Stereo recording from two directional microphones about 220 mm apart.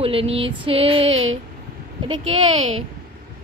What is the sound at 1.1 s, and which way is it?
Speech, 65° right (ahead or behind).